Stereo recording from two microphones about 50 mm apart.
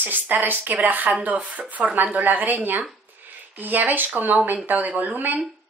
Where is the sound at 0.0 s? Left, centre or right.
Right.